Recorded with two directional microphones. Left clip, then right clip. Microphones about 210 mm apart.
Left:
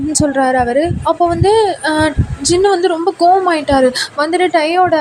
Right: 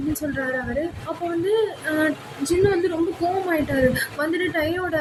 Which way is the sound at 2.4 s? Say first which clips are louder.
Left 8 dB; 30° left (ahead or behind).